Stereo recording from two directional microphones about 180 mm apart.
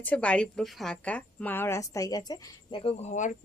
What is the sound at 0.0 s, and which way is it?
A woman's voice, 10° left (ahead or behind).